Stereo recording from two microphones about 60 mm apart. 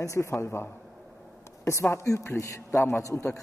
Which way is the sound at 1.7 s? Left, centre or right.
Left.